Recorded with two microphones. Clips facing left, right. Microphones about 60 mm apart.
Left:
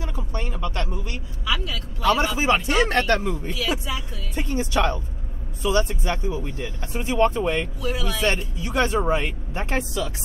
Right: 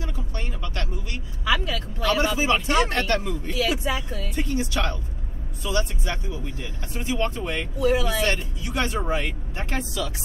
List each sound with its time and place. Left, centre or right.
0.1 s a sound: left
1.4 s vehicle: right
2.0 s a sound: left
2.3 s speech: left
5.6 s speech: left
7.8 s speech: right
8.2 s speech: left